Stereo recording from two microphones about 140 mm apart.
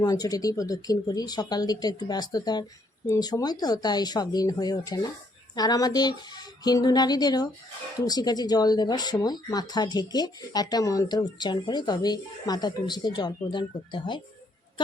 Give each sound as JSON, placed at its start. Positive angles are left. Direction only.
{"t": 0.0, "sound": "speech", "side_deg": 25}